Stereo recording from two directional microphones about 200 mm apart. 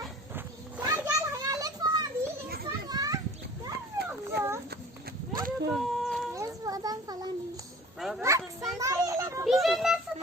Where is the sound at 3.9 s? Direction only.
15° right (ahead or behind).